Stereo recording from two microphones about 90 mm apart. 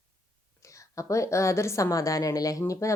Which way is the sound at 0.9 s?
35° left (ahead or behind).